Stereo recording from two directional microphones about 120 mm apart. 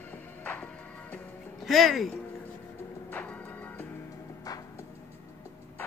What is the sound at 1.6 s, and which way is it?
Speech, centre (ahead or behind).